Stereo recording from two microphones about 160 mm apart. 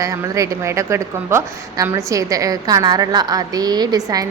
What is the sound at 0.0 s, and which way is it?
A woman's voice, 20° right (ahead or behind).